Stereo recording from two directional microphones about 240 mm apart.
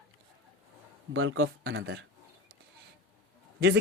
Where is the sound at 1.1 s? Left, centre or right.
Right.